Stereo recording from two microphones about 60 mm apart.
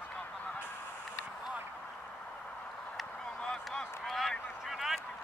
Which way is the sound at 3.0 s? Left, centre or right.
Centre.